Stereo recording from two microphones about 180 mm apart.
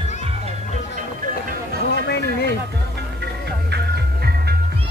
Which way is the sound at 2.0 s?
75° left (ahead or behind).